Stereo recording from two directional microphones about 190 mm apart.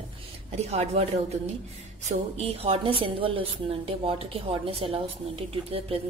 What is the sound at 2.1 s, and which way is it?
A woman's voice, 30° right (ahead or behind).